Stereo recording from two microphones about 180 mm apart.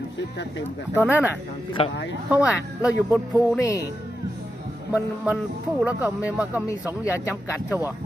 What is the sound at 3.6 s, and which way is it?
Speech, 15° left (ahead or behind).